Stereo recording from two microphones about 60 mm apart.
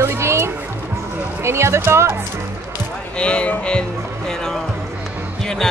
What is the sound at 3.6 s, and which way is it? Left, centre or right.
Music, centre.